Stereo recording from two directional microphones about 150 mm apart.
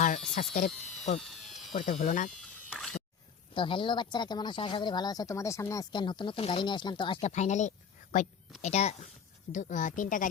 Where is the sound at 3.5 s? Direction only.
35° left (ahead or behind).